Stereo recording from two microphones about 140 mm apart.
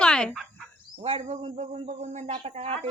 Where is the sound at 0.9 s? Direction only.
45° right (ahead or behind).